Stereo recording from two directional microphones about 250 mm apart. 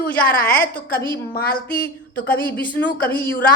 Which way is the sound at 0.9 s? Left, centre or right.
Left.